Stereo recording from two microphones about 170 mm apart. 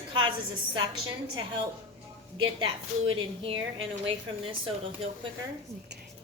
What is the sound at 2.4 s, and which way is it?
A woman's voice, 30° right (ahead or behind).